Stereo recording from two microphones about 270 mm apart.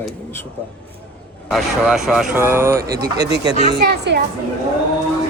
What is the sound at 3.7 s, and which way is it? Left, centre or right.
Speech, right.